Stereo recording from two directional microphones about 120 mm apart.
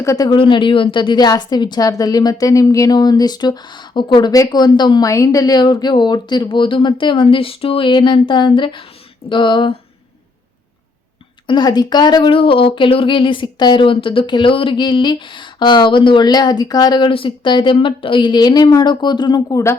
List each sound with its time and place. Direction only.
0.0 s speech: 25° left (ahead or behind)
0.3 s a woman's voice: 45° left (ahead or behind)
11.4 s a woman's voice: 40° left (ahead or behind)